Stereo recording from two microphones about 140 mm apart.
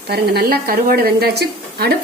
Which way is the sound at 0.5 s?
90° right.